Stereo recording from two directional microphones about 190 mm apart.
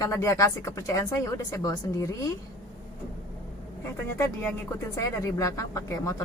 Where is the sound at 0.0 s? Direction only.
15° left (ahead or behind).